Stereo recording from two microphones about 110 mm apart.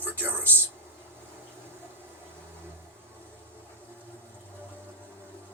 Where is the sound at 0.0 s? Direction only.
20° right (ahead or behind).